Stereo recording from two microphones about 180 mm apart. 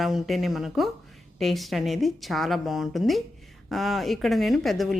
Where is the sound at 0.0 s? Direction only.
Centre (ahead or behind).